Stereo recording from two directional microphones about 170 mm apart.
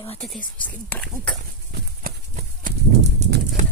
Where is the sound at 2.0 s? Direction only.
55° right (ahead or behind).